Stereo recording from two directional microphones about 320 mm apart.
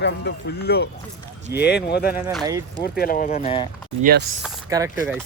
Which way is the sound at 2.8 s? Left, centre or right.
Left.